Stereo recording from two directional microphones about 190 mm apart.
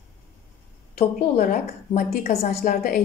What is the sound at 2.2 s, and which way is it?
Speech, 40° left (ahead or behind).